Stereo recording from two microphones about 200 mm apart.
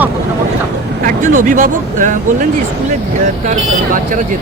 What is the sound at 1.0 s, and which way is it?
Speech, 40° right (ahead or behind).